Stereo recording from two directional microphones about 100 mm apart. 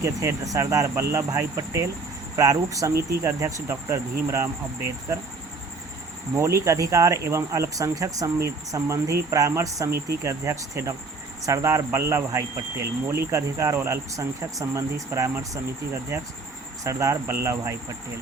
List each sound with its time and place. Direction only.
0.0 s speech: 30° right (ahead or behind)
6.3 s speech: 30° right (ahead or behind)
16.8 s speech: 30° right (ahead or behind)